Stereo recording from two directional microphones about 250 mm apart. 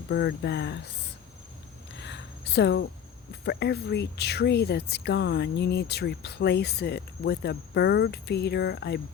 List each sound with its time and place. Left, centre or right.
0.1 s speech: left
2.0 s a sound: left
3.4 s speech: left